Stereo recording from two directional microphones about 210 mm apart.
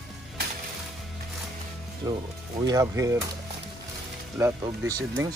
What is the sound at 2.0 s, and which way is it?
Speech, 15° right (ahead or behind).